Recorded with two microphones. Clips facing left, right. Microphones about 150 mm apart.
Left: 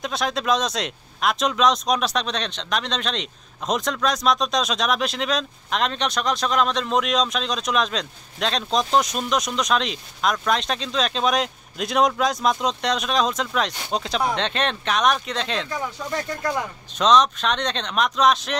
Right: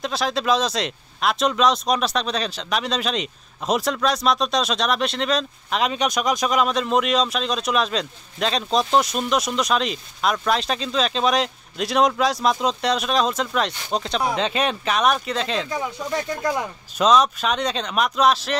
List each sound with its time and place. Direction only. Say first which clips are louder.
0.0 s speech: right 2 dB; centre (ahead or behind)
15.7 s speech: right 2 dB; 15° right (ahead or behind)